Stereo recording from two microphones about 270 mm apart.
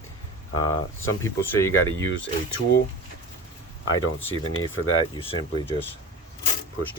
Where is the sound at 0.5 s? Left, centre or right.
Left.